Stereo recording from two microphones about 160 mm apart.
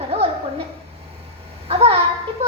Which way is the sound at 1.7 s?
40° right (ahead or behind).